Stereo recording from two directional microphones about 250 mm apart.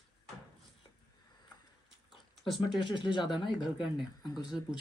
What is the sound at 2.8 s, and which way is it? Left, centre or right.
Speech, centre.